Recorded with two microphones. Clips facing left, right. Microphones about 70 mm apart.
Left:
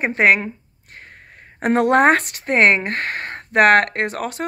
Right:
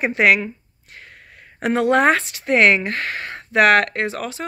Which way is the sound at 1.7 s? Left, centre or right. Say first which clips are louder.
Left 2 dB; left.